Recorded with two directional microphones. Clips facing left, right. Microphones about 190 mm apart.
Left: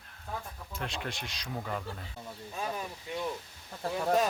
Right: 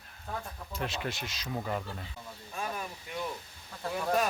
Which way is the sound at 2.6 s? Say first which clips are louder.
Left 1 dB; 20° left (ahead or behind).